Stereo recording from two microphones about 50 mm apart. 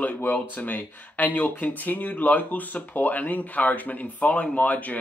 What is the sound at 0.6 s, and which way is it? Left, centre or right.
Speech, left.